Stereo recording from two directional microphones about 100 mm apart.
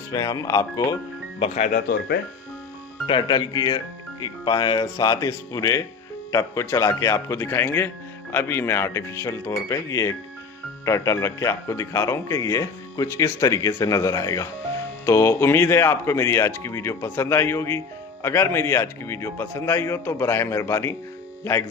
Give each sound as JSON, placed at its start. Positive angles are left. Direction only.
{"t": 0.1, "sound": "speech", "side_deg": 35}
{"t": 3.1, "sound": "speech", "side_deg": 50}